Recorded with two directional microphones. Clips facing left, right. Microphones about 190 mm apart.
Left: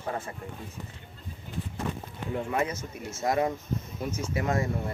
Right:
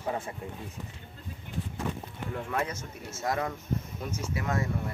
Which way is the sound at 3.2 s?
20° left (ahead or behind).